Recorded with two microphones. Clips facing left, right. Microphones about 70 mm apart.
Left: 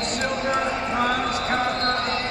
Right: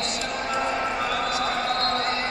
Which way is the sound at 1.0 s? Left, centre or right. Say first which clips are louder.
Left 2 dB; left.